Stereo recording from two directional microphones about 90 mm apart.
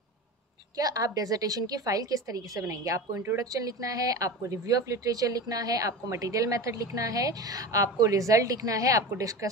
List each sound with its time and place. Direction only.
0.7 s a woman's voice: 40° right (ahead or behind)